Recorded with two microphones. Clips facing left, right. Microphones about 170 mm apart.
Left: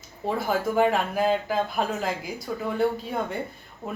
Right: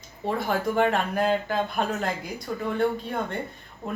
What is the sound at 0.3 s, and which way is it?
Speech, 5° left (ahead or behind).